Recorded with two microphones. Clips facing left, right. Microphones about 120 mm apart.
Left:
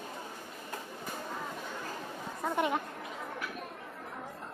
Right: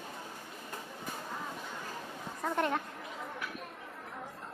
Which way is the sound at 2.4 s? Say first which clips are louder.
Left 1 dB; 10° left (ahead or behind).